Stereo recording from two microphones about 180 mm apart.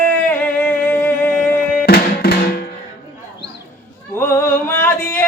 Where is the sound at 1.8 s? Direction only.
60° left (ahead or behind).